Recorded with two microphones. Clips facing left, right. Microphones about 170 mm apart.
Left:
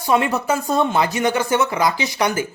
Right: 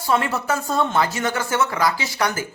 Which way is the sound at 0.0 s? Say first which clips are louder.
Left 3 dB; 15° left (ahead or behind).